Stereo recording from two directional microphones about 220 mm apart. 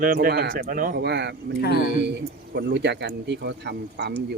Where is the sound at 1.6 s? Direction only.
45° left (ahead or behind).